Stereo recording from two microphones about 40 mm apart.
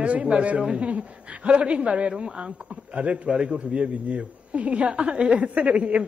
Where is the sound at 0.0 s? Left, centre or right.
Right.